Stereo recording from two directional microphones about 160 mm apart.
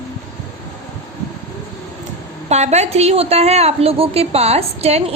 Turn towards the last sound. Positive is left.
turn(degrees=-40)  # may be behind; listen again after turning